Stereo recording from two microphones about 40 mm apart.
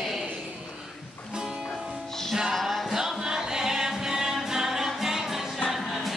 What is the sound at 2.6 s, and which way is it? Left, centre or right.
Music, centre.